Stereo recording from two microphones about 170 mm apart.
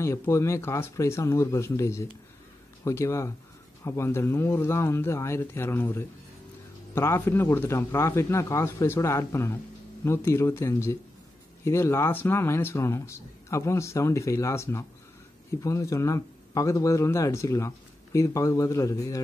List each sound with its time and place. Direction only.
0.0 s speech: 15° left (ahead or behind)